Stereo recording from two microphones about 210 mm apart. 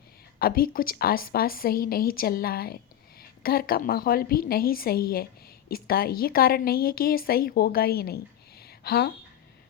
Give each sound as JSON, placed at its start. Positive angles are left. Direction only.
{"t": 0.3, "sound": "a woman's voice", "side_deg": 45}